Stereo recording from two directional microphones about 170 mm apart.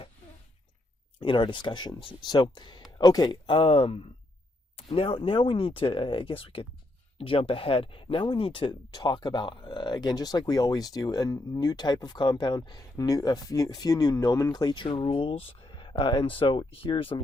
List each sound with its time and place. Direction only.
1.2 s speech: 30° left (ahead or behind)